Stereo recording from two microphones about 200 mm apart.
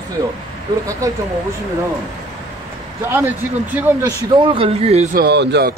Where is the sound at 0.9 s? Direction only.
15° right (ahead or behind).